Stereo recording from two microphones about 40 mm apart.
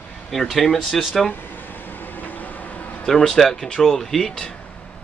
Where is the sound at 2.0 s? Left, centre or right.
Left.